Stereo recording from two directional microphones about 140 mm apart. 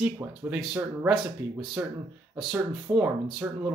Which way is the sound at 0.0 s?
10° right (ahead or behind).